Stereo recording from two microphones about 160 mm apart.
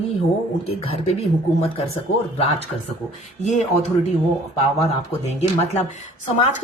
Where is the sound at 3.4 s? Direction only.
50° left (ahead or behind).